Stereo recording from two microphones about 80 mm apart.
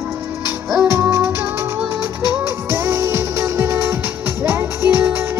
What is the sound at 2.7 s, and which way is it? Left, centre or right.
Music, right.